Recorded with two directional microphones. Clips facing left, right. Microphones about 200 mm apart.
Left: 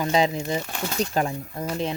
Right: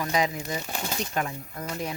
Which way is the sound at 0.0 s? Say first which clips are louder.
Left 5 dB; 25° left (ahead or behind).